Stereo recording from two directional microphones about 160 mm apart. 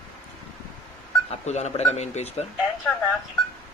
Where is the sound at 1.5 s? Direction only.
45° left (ahead or behind).